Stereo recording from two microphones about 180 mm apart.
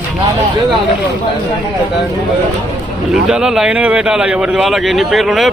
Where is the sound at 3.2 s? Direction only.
5° right (ahead or behind).